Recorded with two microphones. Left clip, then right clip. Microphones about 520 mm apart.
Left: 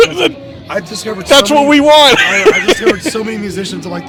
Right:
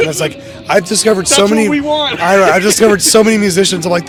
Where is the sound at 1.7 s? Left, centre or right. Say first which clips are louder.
Left 9 dB; left.